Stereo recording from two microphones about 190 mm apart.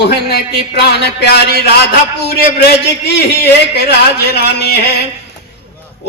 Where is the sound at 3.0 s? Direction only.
60° left (ahead or behind).